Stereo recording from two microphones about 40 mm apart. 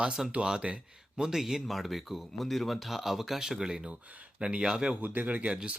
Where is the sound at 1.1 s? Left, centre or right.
Centre.